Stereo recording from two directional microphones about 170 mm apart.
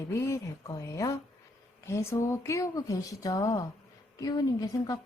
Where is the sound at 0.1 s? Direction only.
15° left (ahead or behind).